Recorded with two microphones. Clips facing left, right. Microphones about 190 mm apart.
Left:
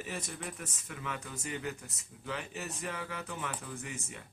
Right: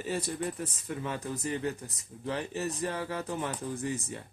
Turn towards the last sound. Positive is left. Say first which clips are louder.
# right 9 dB
turn(degrees=-35)  # may be behind; listen again after turning